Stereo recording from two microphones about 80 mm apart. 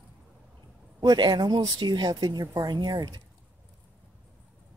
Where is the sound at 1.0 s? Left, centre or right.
Right.